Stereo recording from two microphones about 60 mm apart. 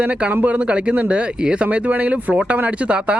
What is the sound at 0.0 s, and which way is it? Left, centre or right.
Speech, right.